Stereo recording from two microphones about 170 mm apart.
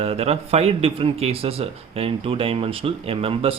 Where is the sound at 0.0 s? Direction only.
35° right (ahead or behind).